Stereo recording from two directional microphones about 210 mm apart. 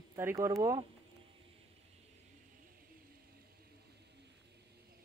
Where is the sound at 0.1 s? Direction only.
15° right (ahead or behind).